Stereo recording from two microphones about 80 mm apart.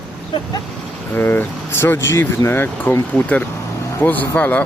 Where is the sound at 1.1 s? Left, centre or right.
Left.